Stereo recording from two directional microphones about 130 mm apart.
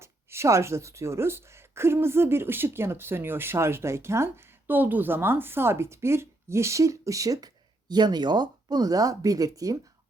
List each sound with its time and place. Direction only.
0.0 s speech: 20° right (ahead or behind)